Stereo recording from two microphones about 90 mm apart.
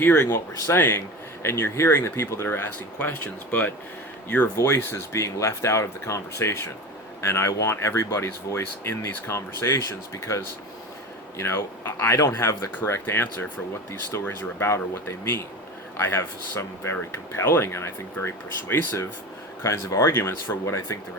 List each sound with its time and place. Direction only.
0.0 s speech: 20° left (ahead or behind)
3.0 s speech: 15° left (ahead or behind)
4.5 s speech: 30° left (ahead or behind)
19.6 s speech: 35° left (ahead or behind)